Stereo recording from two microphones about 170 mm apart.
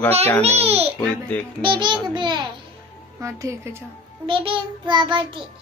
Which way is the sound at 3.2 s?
15° right (ahead or behind).